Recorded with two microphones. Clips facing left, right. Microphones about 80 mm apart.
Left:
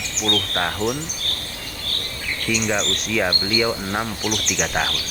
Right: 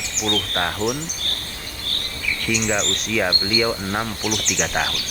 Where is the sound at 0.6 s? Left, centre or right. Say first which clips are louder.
Even; centre.